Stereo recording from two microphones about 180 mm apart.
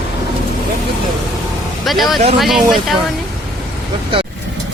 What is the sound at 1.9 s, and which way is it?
Speech, centre (ahead or behind).